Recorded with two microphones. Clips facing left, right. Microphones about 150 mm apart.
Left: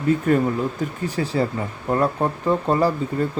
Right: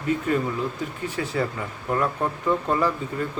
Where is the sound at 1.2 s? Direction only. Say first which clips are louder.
Left 4 dB; 35° left (ahead or behind).